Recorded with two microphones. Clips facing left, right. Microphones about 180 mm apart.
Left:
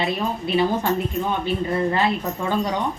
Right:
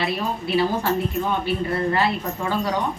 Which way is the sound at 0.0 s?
20° left (ahead or behind).